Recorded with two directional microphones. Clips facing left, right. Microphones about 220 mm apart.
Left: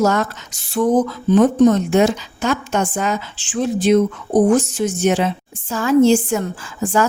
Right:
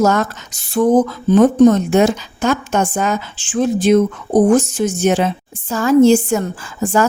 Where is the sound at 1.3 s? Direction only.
45° right (ahead or behind).